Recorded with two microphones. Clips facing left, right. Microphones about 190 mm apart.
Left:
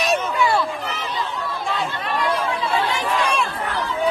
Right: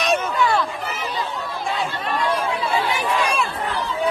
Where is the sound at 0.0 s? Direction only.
5° left (ahead or behind).